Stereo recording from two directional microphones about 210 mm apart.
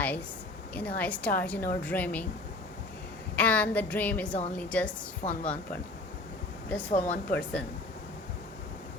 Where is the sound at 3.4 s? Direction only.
5° left (ahead or behind).